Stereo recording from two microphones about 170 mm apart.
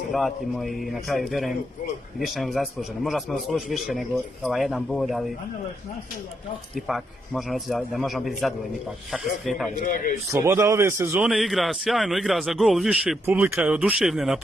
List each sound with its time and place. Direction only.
0.1 s a man's voice: centre (ahead or behind)
6.9 s a man's voice: centre (ahead or behind)
9.8 s a man's voice: 55° left (ahead or behind)
10.3 s a man's voice: 15° right (ahead or behind)
11.2 s a man's voice: centre (ahead or behind)